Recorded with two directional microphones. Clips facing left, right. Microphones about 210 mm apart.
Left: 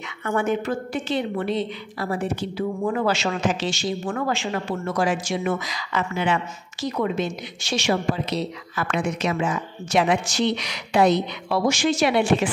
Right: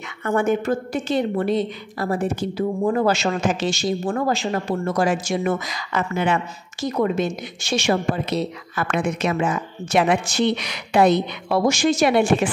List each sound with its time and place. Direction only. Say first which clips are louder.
0.2 s a woman's voice: right 3 dB; 45° right (ahead or behind)